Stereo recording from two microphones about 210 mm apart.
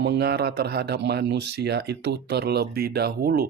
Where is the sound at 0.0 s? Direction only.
50° right (ahead or behind).